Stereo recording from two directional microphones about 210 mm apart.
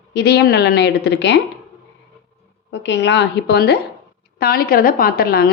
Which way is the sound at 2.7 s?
55° left (ahead or behind).